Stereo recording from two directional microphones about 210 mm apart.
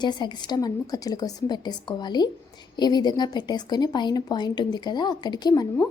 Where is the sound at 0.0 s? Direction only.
20° left (ahead or behind).